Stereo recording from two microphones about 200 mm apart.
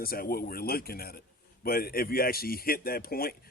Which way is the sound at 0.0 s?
50° left (ahead or behind).